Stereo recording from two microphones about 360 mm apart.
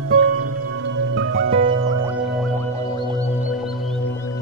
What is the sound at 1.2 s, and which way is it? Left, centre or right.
Music, right.